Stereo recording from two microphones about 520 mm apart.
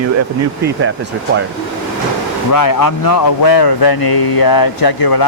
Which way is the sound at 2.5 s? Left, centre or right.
Left.